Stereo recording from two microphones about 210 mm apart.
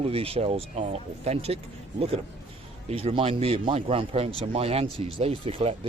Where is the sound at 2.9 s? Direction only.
30° right (ahead or behind).